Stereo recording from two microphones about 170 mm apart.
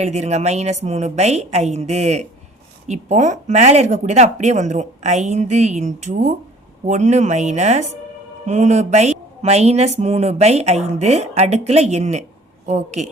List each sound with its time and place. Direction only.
0.0 s speech: 40° right (ahead or behind)